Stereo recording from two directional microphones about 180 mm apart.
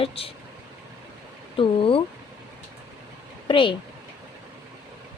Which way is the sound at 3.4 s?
30° left (ahead or behind).